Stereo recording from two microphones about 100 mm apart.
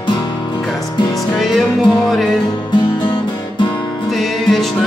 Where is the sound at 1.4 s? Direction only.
Centre (ahead or behind).